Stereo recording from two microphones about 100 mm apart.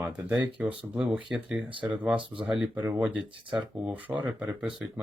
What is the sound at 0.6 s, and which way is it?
Speech, 15° right (ahead or behind).